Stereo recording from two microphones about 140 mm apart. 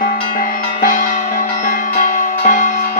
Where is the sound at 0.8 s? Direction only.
70° left (ahead or behind).